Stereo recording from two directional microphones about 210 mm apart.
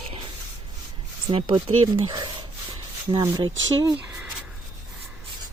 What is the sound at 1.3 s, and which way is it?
Speech, 25° right (ahead or behind).